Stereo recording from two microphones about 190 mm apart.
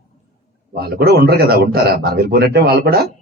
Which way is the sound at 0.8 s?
55° right (ahead or behind).